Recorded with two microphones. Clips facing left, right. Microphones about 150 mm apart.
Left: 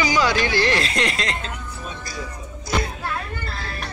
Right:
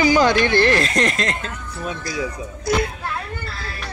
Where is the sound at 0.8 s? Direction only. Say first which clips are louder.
Right 4 dB; 45° right (ahead or behind).